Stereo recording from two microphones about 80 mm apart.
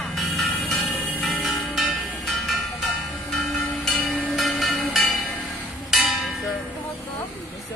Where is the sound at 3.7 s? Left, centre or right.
Centre.